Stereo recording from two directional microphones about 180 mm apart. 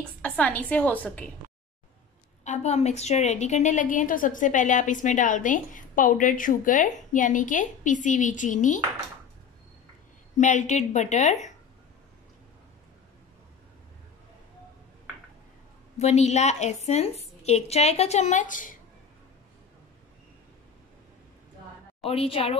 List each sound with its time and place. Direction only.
0.0 s a woman's voice: 5° left (ahead or behind)
2.4 s a woman's voice: 40° left (ahead or behind)
10.3 s a woman's voice: 40° left (ahead or behind)
16.0 s a woman's voice: 35° left (ahead or behind)
22.0 s a woman's voice: 35° left (ahead or behind)